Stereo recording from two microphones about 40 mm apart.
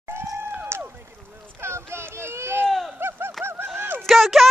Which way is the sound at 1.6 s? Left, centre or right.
Right.